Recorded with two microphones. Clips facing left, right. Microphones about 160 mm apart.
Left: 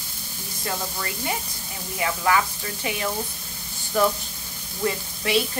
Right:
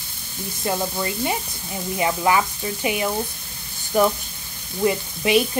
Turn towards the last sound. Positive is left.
turn(degrees=-15)  # may be behind; listen again after turning